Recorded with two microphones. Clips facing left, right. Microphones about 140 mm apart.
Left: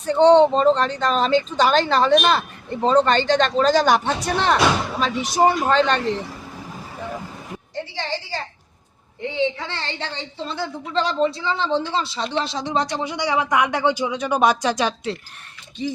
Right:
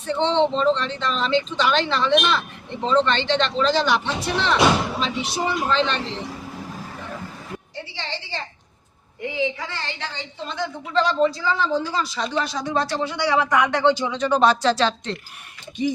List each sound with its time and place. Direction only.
0.0 s speech: 40° left (ahead or behind)
9.2 s a woman's voice: 30° left (ahead or behind); by 15.2 s 10° left (ahead or behind)